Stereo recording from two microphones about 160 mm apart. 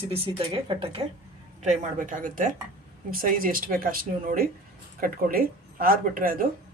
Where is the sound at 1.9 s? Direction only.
55° right (ahead or behind).